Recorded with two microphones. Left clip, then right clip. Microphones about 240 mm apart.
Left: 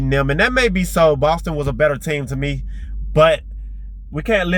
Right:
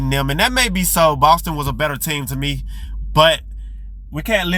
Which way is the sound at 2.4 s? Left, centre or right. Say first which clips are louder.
Right 1 dB; right.